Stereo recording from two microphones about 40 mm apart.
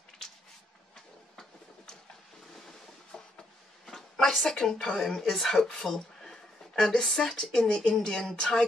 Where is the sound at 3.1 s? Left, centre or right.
Centre.